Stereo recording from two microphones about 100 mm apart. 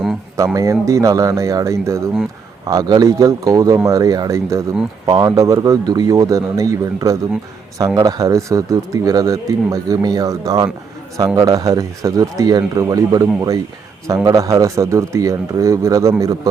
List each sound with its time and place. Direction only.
0.3 s speech: 35° right (ahead or behind)
2.6 s speech: 40° right (ahead or behind)